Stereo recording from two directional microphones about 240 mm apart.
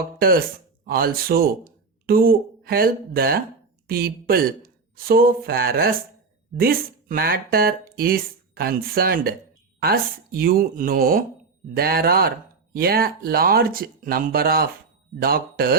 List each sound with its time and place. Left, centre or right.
0.2 s speech: right